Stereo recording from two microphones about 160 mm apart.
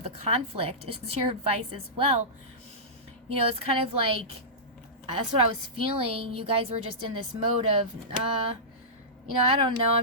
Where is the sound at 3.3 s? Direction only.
35° right (ahead or behind).